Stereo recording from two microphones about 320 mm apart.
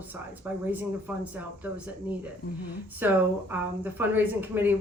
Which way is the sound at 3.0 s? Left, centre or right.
Centre.